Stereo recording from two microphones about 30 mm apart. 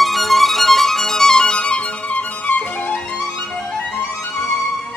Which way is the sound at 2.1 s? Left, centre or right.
Left.